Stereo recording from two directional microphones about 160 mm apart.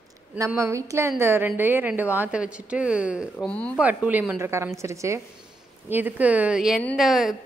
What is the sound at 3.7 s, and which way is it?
A woman's voice, 10° right (ahead or behind).